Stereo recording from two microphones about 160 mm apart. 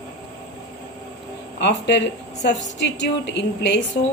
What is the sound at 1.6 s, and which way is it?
A woman's voice, 90° left.